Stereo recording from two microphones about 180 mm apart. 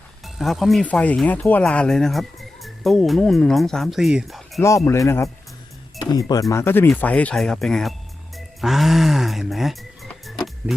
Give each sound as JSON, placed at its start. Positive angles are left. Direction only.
{"t": 0.3, "sound": "speech", "side_deg": 0}
{"t": 4.9, "sound": "a man's voice", "side_deg": 15}
{"t": 8.4, "sound": "music", "side_deg": 0}